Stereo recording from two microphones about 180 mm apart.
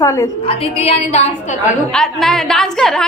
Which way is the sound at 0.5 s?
30° left (ahead or behind).